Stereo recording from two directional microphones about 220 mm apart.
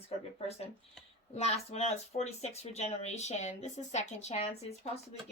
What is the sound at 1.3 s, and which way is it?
Speech, 30° left (ahead or behind).